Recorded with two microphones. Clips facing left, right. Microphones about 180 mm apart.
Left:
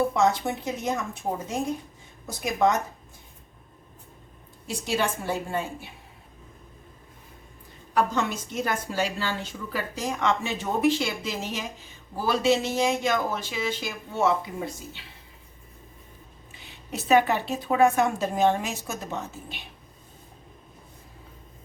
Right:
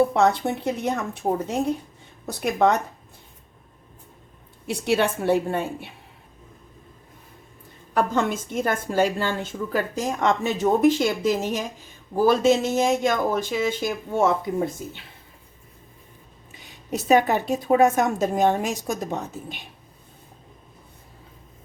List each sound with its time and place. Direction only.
0.1 s a woman's voice: 60° right (ahead or behind)
4.6 s a woman's voice: 60° right (ahead or behind)
7.9 s a woman's voice: 50° right (ahead or behind)
16.6 s a woman's voice: 40° right (ahead or behind)